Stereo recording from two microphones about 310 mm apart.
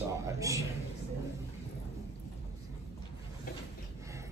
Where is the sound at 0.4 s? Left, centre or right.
Centre.